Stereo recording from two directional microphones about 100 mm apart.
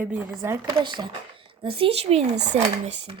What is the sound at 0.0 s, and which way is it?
Speech, 15° right (ahead or behind).